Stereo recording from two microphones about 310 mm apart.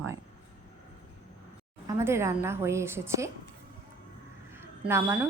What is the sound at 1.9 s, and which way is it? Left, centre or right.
A woman's voice, centre.